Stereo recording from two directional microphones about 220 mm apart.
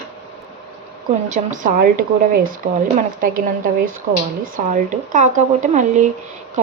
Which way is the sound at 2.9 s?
35° right (ahead or behind).